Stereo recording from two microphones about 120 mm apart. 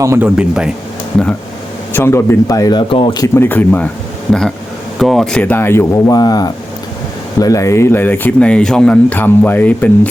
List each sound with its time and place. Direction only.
0.2 s speech: 10° right (ahead or behind)
1.9 s speech: 20° left (ahead or behind); by 3.2 s 40° left (ahead or behind)
3.3 s speech: 15° left (ahead or behind)
6.1 s speech: 30° left (ahead or behind); by 10.1 s 10° left (ahead or behind)